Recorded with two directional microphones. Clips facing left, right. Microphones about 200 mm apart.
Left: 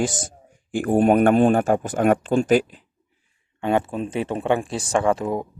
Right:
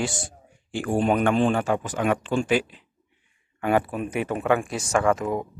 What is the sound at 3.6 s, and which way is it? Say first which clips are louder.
Speech: left 1 dB; 25° left (ahead or behind).